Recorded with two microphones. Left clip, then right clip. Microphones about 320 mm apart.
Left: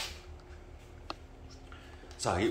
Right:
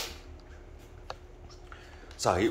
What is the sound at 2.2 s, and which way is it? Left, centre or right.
Speech, centre.